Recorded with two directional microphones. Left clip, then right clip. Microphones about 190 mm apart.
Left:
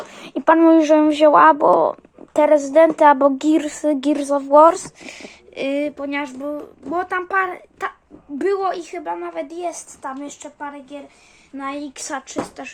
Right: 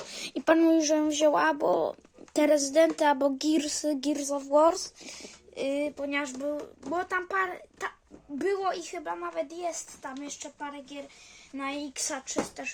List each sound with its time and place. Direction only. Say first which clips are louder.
0.1 s speech: left 9 dB; 25° right (ahead or behind)
4.0 s a woman's voice: left 11 dB; 5° right (ahead or behind)